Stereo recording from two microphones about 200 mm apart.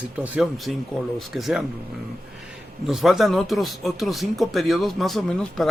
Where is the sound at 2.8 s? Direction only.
Centre (ahead or behind).